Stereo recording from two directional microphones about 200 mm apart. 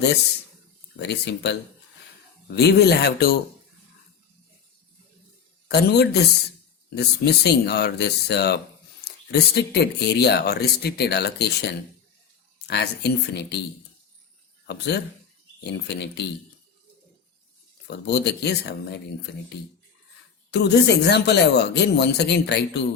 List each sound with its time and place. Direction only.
0.9 s speech: 60° left (ahead or behind)
2.6 s speech: 55° left (ahead or behind)
5.6 s speech: 55° left (ahead or behind)
14.7 s speech: 55° left (ahead or behind)
17.8 s speech: 55° left (ahead or behind)
20.5 s speech: 55° left (ahead or behind)